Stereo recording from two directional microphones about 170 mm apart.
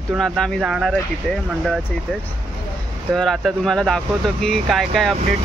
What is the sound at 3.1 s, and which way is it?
Speech, centre (ahead or behind).